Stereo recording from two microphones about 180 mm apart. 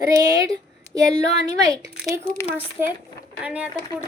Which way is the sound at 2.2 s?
5° left (ahead or behind).